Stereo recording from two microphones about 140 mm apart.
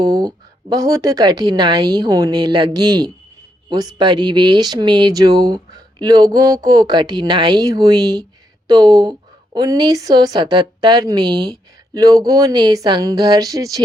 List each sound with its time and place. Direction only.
0.0 s speech: 25° right (ahead or behind)